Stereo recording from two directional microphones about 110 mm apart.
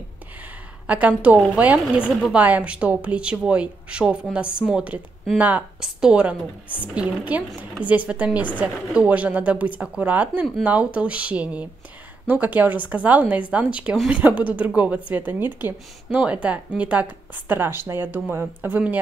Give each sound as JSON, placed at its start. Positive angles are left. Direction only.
{"t": 0.8, "sound": "a woman's voice", "side_deg": -15}